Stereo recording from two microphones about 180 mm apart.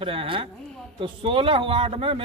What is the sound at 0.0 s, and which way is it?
A man's voice, 30° right (ahead or behind).